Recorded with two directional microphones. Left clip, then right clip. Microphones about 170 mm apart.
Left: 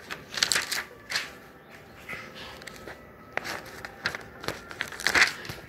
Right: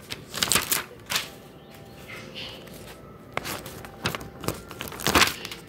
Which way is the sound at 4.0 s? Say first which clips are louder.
Right 2 dB; 45° right (ahead or behind).